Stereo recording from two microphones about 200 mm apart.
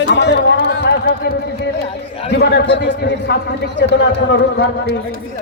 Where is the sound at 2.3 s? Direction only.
60° left (ahead or behind).